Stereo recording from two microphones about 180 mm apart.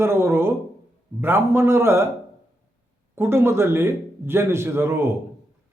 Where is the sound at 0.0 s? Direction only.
15° right (ahead or behind).